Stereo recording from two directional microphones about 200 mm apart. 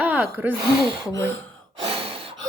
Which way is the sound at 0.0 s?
10° right (ahead or behind).